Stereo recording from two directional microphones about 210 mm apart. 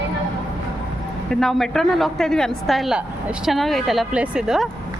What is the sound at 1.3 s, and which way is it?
A woman's voice, centre (ahead or behind).